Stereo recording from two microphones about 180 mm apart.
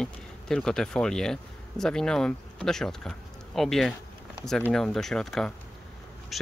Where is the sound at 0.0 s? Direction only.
5° left (ahead or behind).